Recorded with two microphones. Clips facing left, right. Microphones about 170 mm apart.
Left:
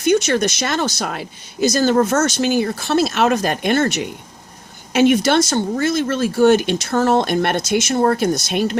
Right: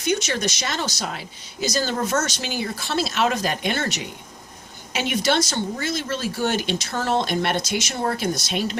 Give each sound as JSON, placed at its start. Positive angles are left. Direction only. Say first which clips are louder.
{"t": 0.0, "sound": "speech", "louder": "left 8 dB", "side_deg": 50}